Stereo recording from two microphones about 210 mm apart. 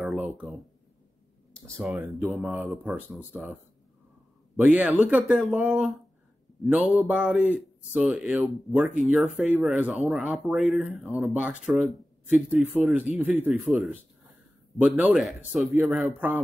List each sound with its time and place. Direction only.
0.0 s a sound: centre (ahead or behind)
1.8 s speech: centre (ahead or behind)
4.6 s speech: 5° right (ahead or behind)